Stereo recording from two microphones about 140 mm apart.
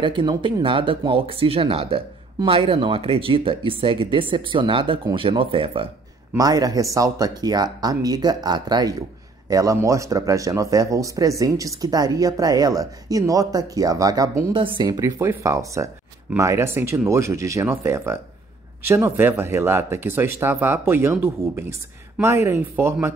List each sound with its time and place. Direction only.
0.0 s speech: 35° right (ahead or behind)
6.3 s speech: 25° right (ahead or behind)
14.5 s speech: 35° right (ahead or behind); by 23.1 s 15° right (ahead or behind)